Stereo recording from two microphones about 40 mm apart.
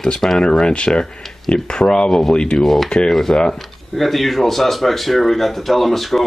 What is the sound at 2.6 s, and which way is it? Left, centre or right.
Speech, centre.